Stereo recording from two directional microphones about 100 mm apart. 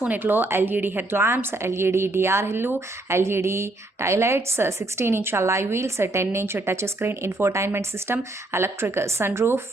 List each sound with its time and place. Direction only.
0.0 s speech: 20° right (ahead or behind)